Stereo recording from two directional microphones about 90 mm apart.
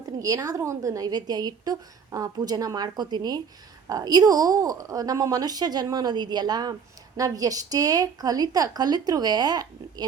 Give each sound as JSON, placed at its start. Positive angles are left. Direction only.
{"t": 0.0, "sound": "a woman's voice", "side_deg": -40}